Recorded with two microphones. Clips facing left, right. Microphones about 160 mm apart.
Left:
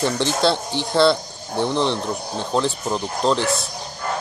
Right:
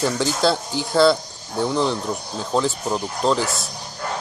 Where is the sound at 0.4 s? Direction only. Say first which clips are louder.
Even; centre (ahead or behind).